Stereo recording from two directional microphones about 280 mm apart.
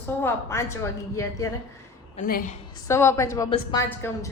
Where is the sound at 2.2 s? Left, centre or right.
Left.